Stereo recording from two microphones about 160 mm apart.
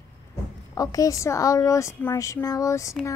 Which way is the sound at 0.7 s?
20° left (ahead or behind).